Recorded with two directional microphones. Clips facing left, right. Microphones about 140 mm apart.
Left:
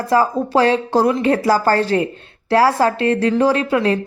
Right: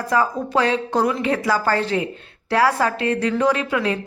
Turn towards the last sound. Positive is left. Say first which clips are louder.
# left 5 dB
turn(degrees=35)  # may be behind; listen again after turning